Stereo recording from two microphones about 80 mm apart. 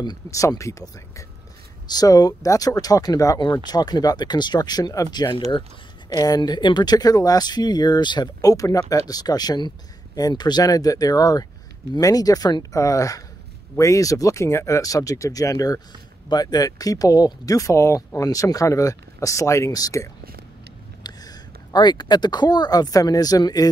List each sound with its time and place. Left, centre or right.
0.3 s speech: left
1.9 s speech: left
6.6 s speech: left
12.7 s speech: left
21.0 s speech: left